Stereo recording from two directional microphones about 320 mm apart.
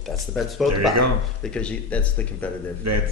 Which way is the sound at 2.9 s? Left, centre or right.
Right.